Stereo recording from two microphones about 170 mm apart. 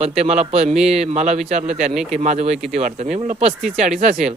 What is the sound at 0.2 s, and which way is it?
Speech, 40° right (ahead or behind).